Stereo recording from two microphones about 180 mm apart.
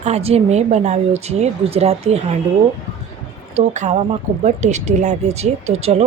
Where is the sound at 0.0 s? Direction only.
35° right (ahead or behind).